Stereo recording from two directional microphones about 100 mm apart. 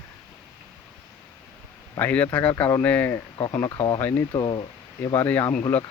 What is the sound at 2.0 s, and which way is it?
Speech, 15° left (ahead or behind).